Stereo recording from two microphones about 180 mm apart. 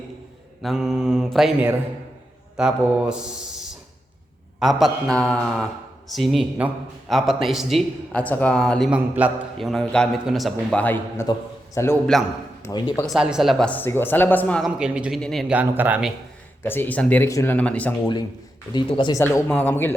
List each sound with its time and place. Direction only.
0.6 s a man's voice: centre (ahead or behind)
13.0 s a woman's voice: centre (ahead or behind)
14.8 s speech: 5° right (ahead or behind)
16.6 s a woman's voice: 10° left (ahead or behind)
18.0 s speech: 20° left (ahead or behind)
19.2 s a woman's voice: 10° left (ahead or behind)